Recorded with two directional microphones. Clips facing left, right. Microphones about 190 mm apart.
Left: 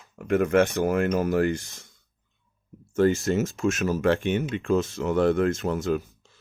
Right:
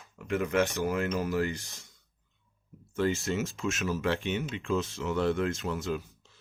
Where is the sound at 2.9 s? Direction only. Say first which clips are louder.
Left 7 dB; 45° left (ahead or behind).